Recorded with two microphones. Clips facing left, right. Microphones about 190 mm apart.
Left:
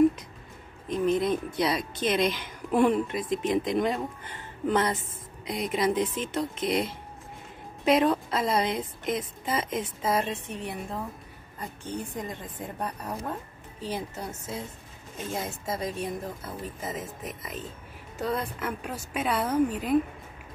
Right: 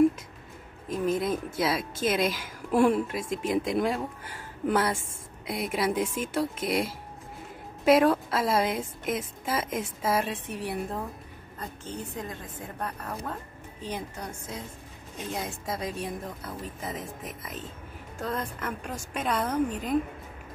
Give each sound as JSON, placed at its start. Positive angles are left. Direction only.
{"t": 0.8, "sound": "speech", "side_deg": -5}
{"t": 12.3, "sound": "a woman's voice", "side_deg": 20}
{"t": 13.8, "sound": "speech", "side_deg": 10}